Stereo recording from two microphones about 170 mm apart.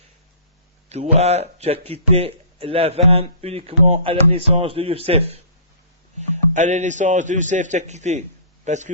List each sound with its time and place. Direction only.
0.9 s a man's voice: 40° right (ahead or behind)